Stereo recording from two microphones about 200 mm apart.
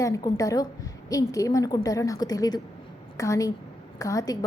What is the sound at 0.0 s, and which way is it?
A woman's voice, 15° left (ahead or behind).